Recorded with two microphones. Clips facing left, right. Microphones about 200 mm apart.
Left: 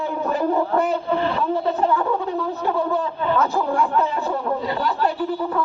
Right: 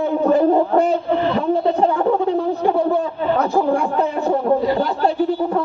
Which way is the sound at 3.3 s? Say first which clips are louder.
Right 4 dB; 30° right (ahead or behind).